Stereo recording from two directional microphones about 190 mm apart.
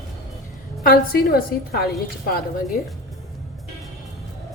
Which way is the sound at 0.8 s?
50° left (ahead or behind).